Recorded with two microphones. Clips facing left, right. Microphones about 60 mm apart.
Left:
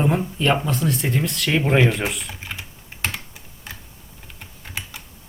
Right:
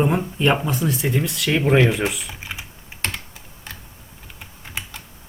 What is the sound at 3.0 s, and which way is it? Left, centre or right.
Computer keyboard, centre.